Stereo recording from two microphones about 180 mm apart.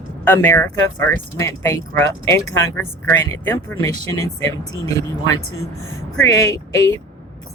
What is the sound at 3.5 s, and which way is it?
Speech, 15° left (ahead or behind).